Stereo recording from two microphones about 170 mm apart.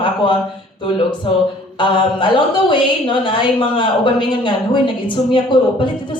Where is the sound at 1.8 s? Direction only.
30° left (ahead or behind).